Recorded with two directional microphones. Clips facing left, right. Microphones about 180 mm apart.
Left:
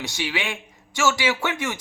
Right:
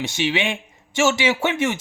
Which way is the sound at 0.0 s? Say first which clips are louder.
Right 6 dB; 20° right (ahead or behind).